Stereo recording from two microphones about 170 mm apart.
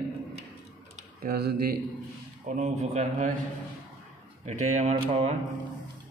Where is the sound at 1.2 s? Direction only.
65° right (ahead or behind).